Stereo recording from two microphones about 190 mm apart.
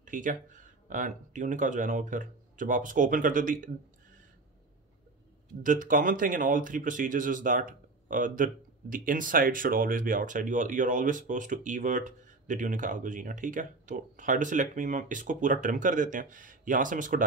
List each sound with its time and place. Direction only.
0.0 s speech: 45° right (ahead or behind)
5.6 s speech: 45° right (ahead or behind)